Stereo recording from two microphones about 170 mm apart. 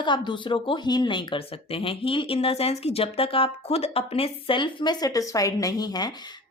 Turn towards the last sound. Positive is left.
turn(degrees=25)  # may be behind; listen again after turning